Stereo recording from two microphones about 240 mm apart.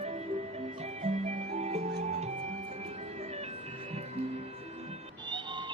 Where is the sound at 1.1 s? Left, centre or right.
Right.